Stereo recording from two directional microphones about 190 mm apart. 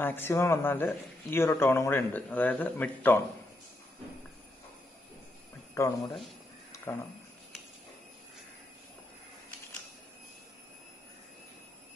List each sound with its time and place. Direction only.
0.0 s a man's voice: 10° left (ahead or behind)
5.8 s a man's voice: 15° left (ahead or behind)